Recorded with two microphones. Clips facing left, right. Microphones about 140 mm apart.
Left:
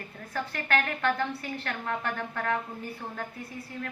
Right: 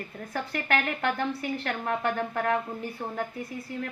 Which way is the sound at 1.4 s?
20° right (ahead or behind).